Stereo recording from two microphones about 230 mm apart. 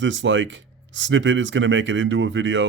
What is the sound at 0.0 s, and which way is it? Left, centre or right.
Speech, right.